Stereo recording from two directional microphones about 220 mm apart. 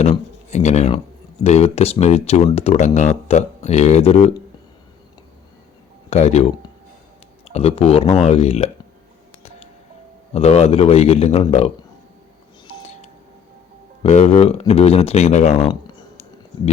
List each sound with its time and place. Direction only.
0.0 s speech: 30° left (ahead or behind)
6.1 s speech: 30° left (ahead or behind)
10.3 s speech: 30° left (ahead or behind)
14.0 s speech: 30° left (ahead or behind)